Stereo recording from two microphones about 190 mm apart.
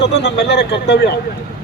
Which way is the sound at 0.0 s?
65° left (ahead or behind).